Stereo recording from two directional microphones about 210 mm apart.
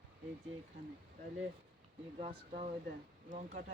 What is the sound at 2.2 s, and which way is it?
Speech, 30° right (ahead or behind).